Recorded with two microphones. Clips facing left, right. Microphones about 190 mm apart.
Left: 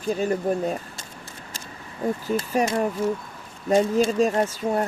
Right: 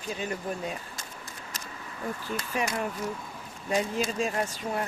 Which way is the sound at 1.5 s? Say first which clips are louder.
Left 4 dB; 35° left (ahead or behind).